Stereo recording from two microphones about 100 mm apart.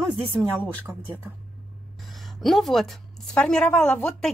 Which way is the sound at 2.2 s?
Centre (ahead or behind).